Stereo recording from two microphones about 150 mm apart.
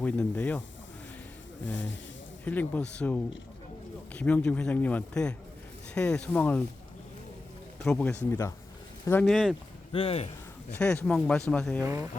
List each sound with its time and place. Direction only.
0.0 s a man's voice: 10° left (ahead or behind)
2.4 s a man's voice: 10° left (ahead or behind)
7.9 s a man's voice: 10° left (ahead or behind)
9.2 s speech: centre (ahead or behind)
9.9 s speech: 40° left (ahead or behind)
10.8 s a man's voice: 5° left (ahead or behind)
11.8 s speech: 20° right (ahead or behind)